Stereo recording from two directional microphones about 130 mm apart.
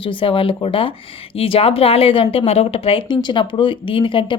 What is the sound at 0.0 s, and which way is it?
A woman's voice, 40° left (ahead or behind).